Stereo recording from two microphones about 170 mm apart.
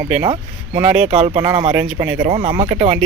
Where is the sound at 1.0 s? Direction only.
35° right (ahead or behind).